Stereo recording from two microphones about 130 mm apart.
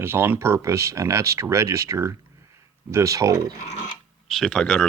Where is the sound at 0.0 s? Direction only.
15° right (ahead or behind).